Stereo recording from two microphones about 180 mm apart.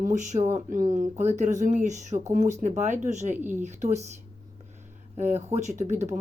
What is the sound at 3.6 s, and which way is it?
Speech, 40° right (ahead or behind).